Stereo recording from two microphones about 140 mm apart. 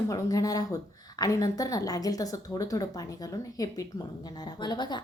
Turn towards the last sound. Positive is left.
turn(degrees=30)  # may be behind; listen again after turning